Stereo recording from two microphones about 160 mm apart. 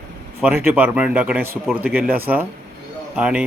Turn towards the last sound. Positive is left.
turn(degrees=-5)  # may be behind; listen again after turning